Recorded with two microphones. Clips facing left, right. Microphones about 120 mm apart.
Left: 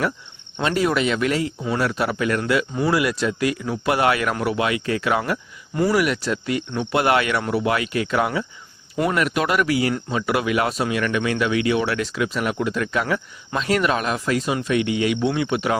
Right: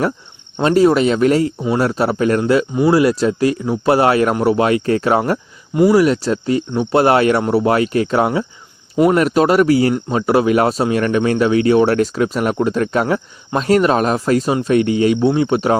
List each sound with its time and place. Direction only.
0.6 s speech: 35° right (ahead or behind)
5.7 s speech: 20° right (ahead or behind)
6.0 s speech: 35° right (ahead or behind)